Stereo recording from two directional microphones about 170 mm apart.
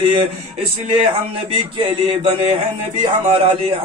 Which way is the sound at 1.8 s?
30° right (ahead or behind).